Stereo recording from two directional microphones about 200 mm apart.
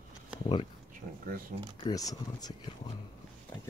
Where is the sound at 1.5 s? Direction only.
45° right (ahead or behind).